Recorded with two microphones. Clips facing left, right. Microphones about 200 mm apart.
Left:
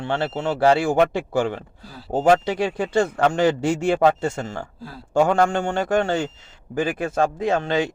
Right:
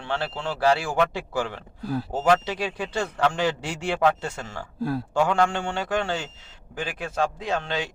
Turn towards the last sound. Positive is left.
turn(degrees=50)  # may be behind; listen again after turning